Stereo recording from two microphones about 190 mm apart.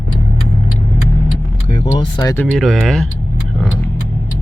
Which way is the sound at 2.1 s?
15° left (ahead or behind).